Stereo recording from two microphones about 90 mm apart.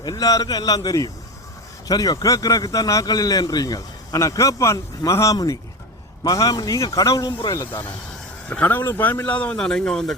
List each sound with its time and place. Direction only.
0.0 s a man's voice: 45° left (ahead or behind)
7.7 s speech: 20° left (ahead or behind); by 10.2 s 5° left (ahead or behind)